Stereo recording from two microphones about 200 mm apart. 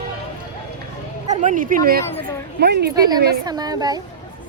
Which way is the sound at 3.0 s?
20° right (ahead or behind).